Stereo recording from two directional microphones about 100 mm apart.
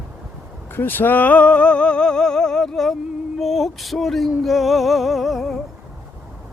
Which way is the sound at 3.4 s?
Centre (ahead or behind).